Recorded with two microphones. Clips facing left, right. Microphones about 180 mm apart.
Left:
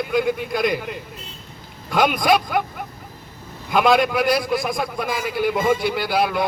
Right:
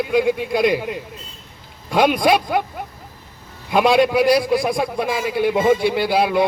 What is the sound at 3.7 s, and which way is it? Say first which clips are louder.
A man's voice: right 2 dB; 30° right (ahead or behind).